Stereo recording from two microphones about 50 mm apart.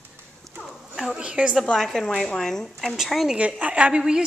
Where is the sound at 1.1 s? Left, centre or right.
Right.